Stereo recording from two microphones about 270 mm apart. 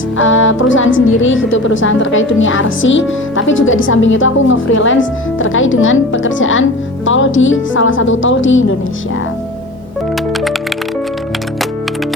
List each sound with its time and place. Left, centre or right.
0.2 s a woman's voice: left